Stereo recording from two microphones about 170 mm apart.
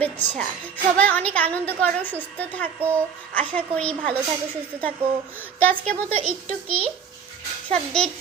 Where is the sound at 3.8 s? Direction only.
5° left (ahead or behind).